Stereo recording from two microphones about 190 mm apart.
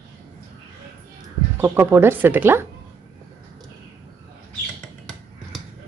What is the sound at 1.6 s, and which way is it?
Speech, 15° right (ahead or behind).